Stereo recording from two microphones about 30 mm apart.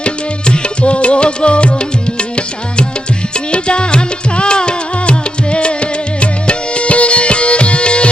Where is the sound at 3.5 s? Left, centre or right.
Left.